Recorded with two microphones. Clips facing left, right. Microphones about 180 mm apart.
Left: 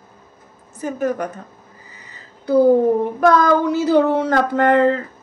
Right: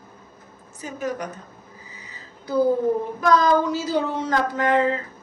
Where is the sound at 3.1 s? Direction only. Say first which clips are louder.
Left 2 dB; 60° left (ahead or behind).